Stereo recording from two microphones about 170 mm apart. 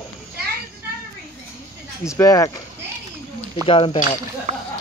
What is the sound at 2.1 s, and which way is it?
Speech, 20° left (ahead or behind).